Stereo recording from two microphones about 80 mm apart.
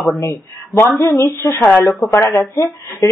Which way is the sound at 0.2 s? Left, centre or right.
Left.